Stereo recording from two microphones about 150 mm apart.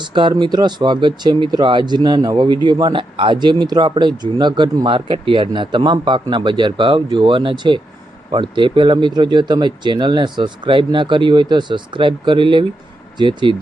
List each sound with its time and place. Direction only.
0.0 s speech: 30° right (ahead or behind)